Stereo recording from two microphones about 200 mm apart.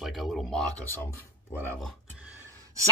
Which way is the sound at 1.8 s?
Centre (ahead or behind).